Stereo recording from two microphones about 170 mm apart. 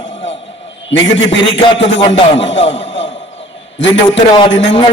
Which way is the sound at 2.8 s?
30° left (ahead or behind).